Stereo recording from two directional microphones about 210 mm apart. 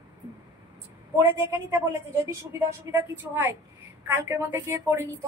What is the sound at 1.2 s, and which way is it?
A woman's voice, 10° right (ahead or behind).